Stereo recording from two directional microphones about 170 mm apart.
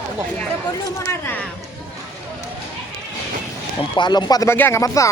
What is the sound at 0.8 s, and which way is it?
Speech, 15° left (ahead or behind).